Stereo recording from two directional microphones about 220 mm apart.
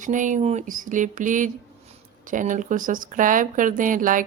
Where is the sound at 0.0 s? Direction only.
35° right (ahead or behind).